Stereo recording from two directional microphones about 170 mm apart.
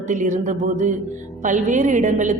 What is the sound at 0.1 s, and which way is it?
A woman's voice, 45° right (ahead or behind).